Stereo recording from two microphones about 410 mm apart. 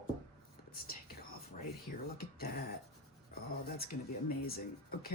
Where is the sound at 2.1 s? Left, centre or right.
Left.